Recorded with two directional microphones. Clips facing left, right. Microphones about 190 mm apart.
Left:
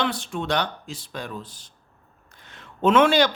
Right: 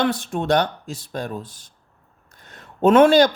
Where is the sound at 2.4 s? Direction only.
40° right (ahead or behind).